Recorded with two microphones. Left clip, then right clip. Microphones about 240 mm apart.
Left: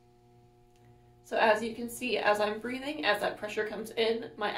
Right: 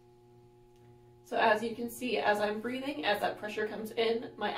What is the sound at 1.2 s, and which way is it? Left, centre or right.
A woman's voice, left.